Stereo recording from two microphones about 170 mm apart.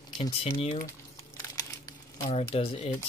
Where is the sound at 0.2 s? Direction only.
35° left (ahead or behind).